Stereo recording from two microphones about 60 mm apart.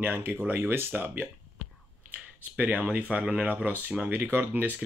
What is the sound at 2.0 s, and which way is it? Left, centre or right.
Speech, right.